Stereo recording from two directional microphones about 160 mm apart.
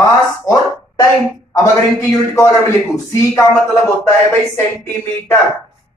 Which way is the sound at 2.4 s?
15° left (ahead or behind).